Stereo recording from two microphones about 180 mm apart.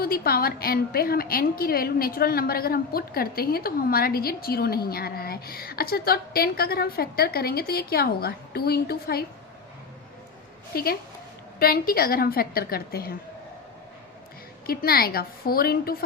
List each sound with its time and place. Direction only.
0.0 s a woman's voice: 55° left (ahead or behind)
11.6 s a woman's voice: 55° left (ahead or behind)
14.7 s a woman's voice: 55° left (ahead or behind)